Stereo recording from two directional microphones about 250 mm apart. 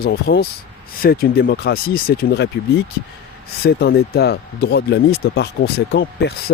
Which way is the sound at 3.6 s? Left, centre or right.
Left.